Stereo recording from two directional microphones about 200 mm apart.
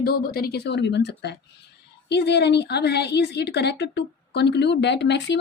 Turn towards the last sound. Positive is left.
turn(degrees=60)  # may be behind; listen again after turning